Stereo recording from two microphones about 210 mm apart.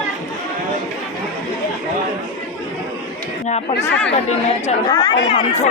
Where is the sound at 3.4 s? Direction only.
30° left (ahead or behind).